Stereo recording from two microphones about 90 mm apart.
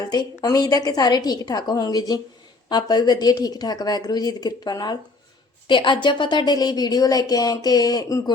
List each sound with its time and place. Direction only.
0.0 s speech: 50° left (ahead or behind)
5.6 s speech: 65° left (ahead or behind); by 8.2 s 45° left (ahead or behind)